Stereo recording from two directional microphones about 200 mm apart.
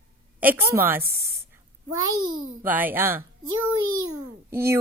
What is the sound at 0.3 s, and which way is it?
Speech, 10° right (ahead or behind).